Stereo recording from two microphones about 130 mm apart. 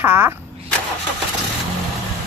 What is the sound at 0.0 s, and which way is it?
Speech, 15° right (ahead or behind).